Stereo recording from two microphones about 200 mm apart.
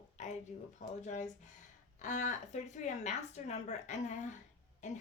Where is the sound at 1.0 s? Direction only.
35° left (ahead or behind).